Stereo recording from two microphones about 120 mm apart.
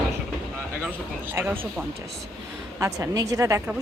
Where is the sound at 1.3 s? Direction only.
20° right (ahead or behind).